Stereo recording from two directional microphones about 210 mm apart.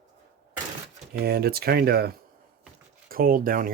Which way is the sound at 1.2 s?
45° right (ahead or behind).